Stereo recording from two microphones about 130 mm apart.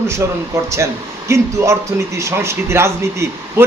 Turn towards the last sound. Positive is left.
turn(degrees=-20)  # may be behind; listen again after turning